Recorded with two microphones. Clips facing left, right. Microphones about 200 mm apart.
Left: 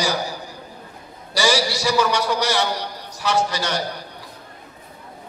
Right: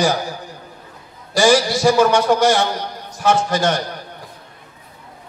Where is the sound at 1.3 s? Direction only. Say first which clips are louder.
Right 6 dB; 50° right (ahead or behind).